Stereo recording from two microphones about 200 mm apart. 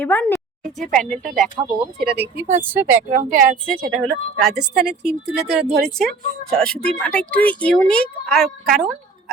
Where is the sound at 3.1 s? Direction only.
40° right (ahead or behind).